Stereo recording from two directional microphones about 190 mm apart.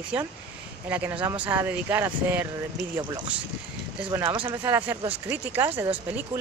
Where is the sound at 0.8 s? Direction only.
10° right (ahead or behind).